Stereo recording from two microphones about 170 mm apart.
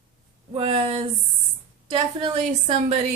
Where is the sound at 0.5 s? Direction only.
35° right (ahead or behind).